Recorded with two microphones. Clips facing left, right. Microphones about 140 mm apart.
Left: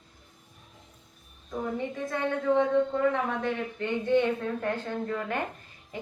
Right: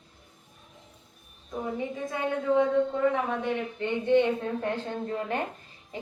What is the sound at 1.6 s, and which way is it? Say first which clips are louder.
A woman's voice: even; 15° right (ahead or behind).